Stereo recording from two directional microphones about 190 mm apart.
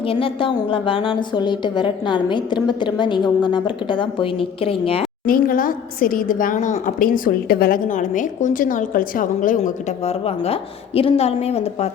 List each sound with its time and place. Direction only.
0.0 s a woman's voice: 30° left (ahead or behind)
5.2 s a woman's voice: 50° left (ahead or behind)